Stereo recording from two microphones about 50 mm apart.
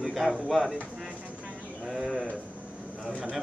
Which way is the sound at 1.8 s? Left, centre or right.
Centre.